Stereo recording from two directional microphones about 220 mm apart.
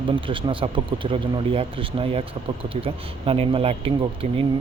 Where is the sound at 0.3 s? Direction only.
25° right (ahead or behind).